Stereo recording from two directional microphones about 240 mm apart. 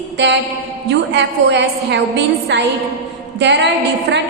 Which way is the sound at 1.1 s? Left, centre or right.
Right.